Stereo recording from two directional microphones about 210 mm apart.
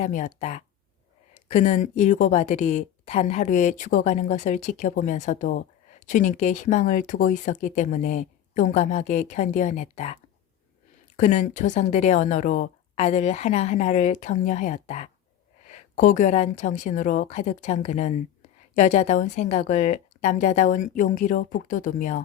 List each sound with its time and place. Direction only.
0.0 s speech: 35° left (ahead or behind)
11.2 s speech: 35° left (ahead or behind)